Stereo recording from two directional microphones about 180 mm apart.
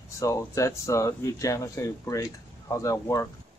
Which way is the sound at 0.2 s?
15° left (ahead or behind).